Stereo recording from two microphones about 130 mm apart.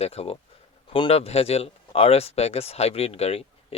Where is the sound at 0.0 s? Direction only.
50° left (ahead or behind).